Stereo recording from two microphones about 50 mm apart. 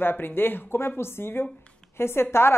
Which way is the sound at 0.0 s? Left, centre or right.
Left.